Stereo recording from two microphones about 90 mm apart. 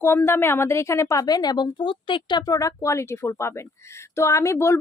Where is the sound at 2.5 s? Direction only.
40° left (ahead or behind).